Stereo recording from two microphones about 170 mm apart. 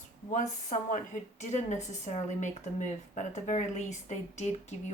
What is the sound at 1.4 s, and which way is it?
A woman's voice, 45° left (ahead or behind).